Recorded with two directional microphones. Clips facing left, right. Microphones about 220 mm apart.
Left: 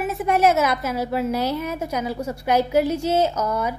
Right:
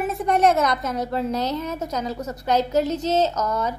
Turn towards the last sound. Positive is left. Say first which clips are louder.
# left 1 dB
turn(degrees=10)  # may be behind; listen again after turning